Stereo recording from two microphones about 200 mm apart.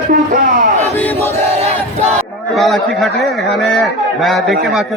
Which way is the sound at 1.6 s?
35° right (ahead or behind).